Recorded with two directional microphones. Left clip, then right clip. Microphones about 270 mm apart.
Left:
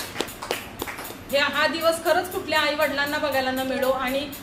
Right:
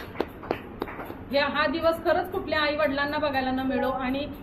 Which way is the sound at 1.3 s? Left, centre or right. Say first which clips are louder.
Left 3 dB; centre.